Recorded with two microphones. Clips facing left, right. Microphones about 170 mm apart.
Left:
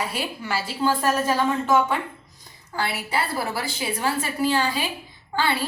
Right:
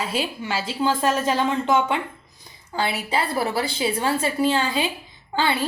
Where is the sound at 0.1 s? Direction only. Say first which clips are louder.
Right 2 dB; 20° right (ahead or behind).